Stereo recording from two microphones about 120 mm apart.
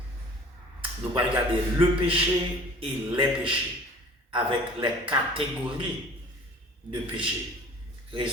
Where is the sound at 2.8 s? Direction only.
45° right (ahead or behind).